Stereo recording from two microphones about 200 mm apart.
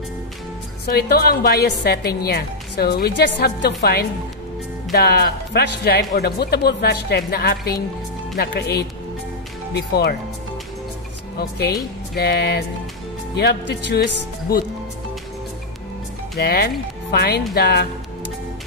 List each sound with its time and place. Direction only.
0.8 s a woman's voice: 50° left (ahead or behind)
11.3 s a woman's voice: 50° left (ahead or behind)
16.3 s a woman's voice: 50° left (ahead or behind)